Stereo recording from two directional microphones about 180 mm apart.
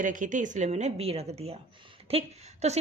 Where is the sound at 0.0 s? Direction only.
45° right (ahead or behind).